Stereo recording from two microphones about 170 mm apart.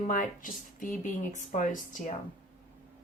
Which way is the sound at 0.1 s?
55° left (ahead or behind).